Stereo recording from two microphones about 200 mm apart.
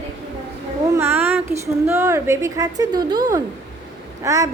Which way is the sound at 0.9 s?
10° right (ahead or behind).